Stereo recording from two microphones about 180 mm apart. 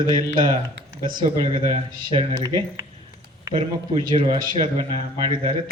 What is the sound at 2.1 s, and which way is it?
A man's voice, 25° right (ahead or behind).